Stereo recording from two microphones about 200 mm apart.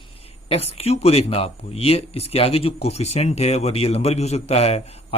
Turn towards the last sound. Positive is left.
turn(degrees=30)  # may be behind; listen again after turning